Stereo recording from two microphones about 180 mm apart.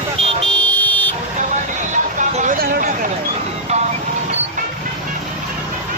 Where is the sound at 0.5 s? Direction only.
5° left (ahead or behind).